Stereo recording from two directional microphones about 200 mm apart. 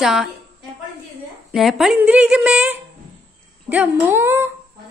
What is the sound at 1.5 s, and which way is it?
A woman's voice, centre (ahead or behind).